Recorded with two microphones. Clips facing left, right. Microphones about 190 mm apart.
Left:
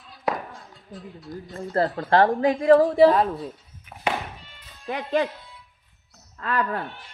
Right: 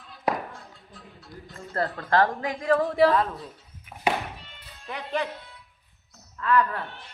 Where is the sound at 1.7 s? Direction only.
25° left (ahead or behind).